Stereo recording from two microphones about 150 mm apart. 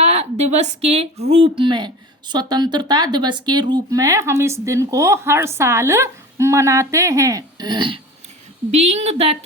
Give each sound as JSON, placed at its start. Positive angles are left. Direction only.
{"t": 0.0, "sound": "a woman's voice", "side_deg": -45}
{"t": 8.7, "sound": "a woman's voice", "side_deg": -45}